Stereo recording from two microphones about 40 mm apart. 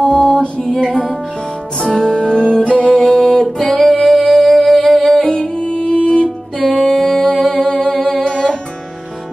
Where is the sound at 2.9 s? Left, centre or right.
Centre.